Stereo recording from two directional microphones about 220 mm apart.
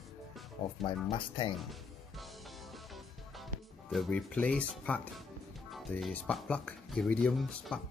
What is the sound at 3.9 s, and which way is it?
Speech, 5° left (ahead or behind).